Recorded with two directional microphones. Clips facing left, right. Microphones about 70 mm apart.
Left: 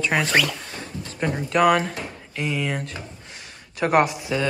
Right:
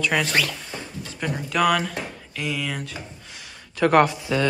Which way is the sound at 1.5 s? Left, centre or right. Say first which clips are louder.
Left 3 dB; left.